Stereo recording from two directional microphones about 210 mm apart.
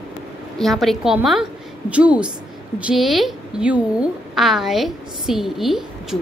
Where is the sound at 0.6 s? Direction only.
Centre (ahead or behind).